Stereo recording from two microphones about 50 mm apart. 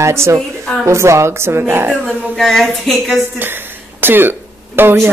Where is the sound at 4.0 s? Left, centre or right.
Right.